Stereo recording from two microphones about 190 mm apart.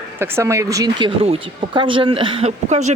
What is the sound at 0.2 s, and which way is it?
Speech, 15° right (ahead or behind).